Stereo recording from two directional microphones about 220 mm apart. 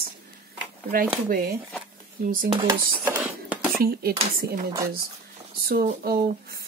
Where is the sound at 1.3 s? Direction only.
40° right (ahead or behind).